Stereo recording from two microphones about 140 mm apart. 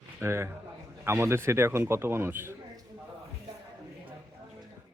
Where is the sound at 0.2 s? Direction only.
20° right (ahead or behind).